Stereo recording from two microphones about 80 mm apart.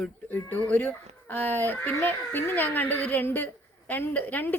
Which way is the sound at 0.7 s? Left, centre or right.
Left.